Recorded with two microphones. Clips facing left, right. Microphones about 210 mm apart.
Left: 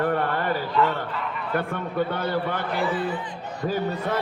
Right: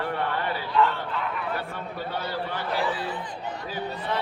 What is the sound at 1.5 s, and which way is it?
A man's voice, 55° left (ahead or behind).